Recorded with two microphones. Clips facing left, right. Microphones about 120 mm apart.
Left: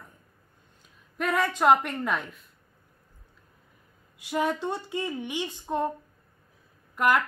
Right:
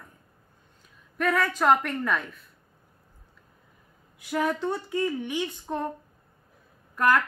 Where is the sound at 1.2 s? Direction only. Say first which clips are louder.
Even; 20° left (ahead or behind).